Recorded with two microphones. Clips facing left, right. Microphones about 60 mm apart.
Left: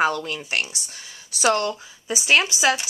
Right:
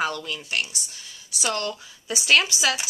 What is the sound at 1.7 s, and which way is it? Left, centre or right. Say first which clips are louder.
Speech: left 3 dB; centre.